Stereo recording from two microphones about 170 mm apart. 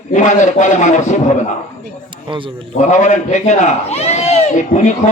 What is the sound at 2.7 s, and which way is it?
A man's voice, 45° left (ahead or behind).